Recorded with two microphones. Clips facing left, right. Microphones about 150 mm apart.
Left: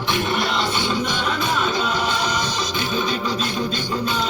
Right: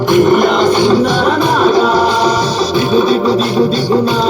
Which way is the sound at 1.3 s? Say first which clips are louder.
Right 11 dB; 65° right (ahead or behind).